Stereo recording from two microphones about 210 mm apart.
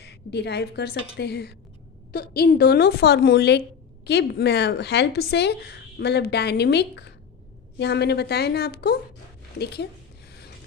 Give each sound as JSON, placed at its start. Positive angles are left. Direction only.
{"t": 0.0, "sound": "a woman's voice", "side_deg": 55}